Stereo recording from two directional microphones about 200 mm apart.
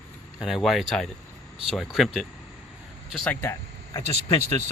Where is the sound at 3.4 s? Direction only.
15° left (ahead or behind).